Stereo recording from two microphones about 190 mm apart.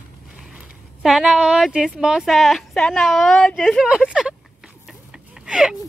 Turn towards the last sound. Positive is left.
turn(degrees=-5)  # may be behind; listen again after turning